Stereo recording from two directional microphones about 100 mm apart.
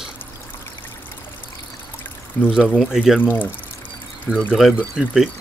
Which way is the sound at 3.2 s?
20° left (ahead or behind).